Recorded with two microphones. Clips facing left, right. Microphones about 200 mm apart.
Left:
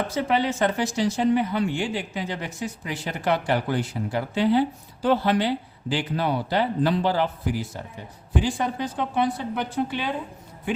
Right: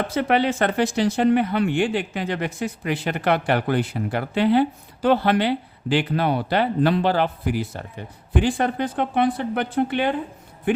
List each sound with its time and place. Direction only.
0.1 s speech: 65° right (ahead or behind)